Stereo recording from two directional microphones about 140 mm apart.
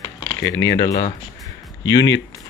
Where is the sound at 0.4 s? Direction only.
25° left (ahead or behind).